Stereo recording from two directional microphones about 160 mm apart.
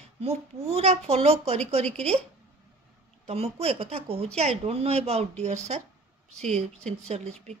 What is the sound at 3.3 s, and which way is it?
A woman's voice, 40° right (ahead or behind).